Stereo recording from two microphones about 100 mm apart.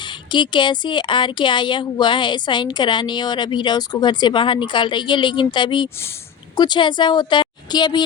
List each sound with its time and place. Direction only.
0.0 s speech: 50° left (ahead or behind)